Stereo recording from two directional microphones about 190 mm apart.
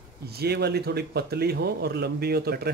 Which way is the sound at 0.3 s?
55° right (ahead or behind).